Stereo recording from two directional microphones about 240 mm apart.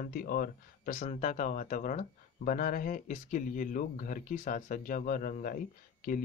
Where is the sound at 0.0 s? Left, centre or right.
Left.